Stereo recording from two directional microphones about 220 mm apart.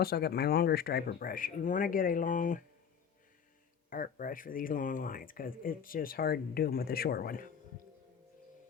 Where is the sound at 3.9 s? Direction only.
40° left (ahead or behind).